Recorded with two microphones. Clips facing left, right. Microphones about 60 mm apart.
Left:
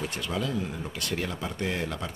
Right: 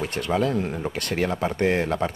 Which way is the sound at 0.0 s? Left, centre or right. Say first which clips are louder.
Right 7 dB; right.